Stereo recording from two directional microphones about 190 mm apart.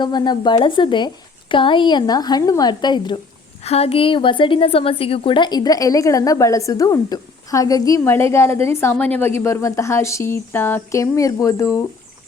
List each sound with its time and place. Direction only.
0.0 s a woman's voice: 20° left (ahead or behind)